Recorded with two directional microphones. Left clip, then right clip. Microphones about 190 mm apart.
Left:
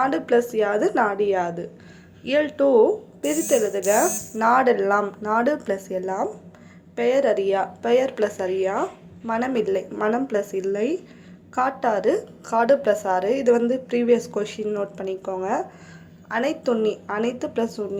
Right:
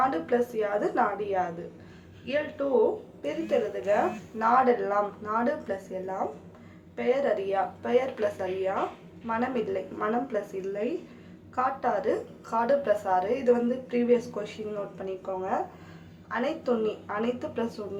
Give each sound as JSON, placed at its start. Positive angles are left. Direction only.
{"t": 0.0, "sound": "a woman's voice", "side_deg": 35}